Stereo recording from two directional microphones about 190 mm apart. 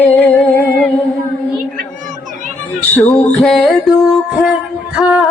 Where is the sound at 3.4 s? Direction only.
Centre (ahead or behind).